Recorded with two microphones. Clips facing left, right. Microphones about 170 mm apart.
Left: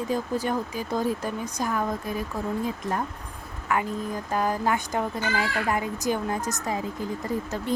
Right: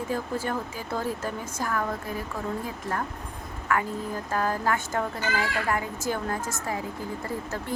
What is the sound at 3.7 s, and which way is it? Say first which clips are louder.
A child's voice: left 1 dB; 20° left (ahead or behind).